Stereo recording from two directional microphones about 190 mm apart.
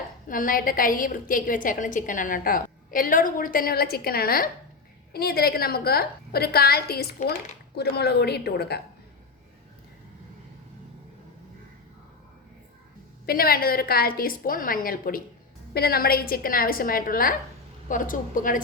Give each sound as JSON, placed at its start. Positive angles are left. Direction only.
{"t": 0.3, "sound": "a woman's voice", "side_deg": 45}
{"t": 13.2, "sound": "a woman's voice", "side_deg": 50}